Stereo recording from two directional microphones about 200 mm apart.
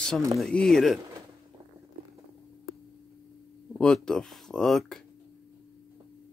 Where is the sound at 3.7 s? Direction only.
5° left (ahead or behind).